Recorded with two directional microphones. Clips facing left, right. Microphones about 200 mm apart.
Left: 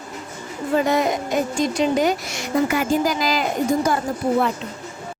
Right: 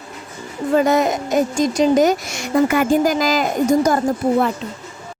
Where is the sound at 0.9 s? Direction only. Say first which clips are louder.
Right 3 dB; 45° right (ahead or behind).